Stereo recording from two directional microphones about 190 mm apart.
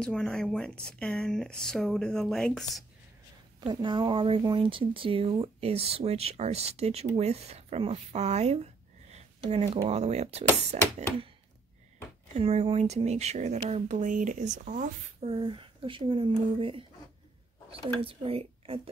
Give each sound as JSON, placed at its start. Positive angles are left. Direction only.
{"t": 0.0, "sound": "speech", "side_deg": 5}
{"t": 3.6, "sound": "speech", "side_deg": -25}
{"t": 9.1, "sound": "a sound", "side_deg": -35}
{"t": 9.8, "sound": "speech", "side_deg": -35}
{"t": 12.4, "sound": "speech", "side_deg": -30}
{"t": 17.8, "sound": "speech", "side_deg": -30}